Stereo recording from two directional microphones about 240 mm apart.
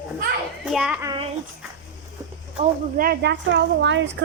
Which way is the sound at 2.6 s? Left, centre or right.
Right.